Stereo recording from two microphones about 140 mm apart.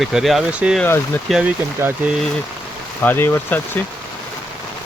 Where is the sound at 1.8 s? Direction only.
15° right (ahead or behind).